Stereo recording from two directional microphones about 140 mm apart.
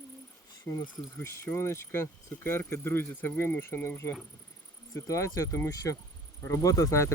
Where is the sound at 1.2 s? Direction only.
20° left (ahead or behind).